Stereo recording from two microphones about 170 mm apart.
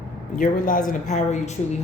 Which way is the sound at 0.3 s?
50° left (ahead or behind).